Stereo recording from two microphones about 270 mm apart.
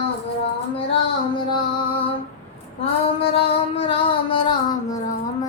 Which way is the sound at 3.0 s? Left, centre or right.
Left.